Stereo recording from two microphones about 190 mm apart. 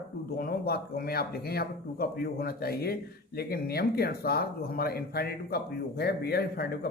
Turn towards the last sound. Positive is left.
turn(degrees=55)  # may be behind; listen again after turning